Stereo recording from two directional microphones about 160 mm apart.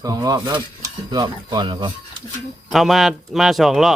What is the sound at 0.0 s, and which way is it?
Speech, 20° right (ahead or behind).